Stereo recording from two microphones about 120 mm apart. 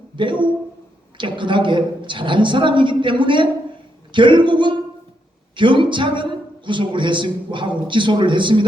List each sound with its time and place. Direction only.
0.2 s a woman's voice: 40° right (ahead or behind)